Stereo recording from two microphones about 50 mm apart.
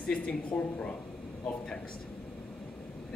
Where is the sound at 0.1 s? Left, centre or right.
Left.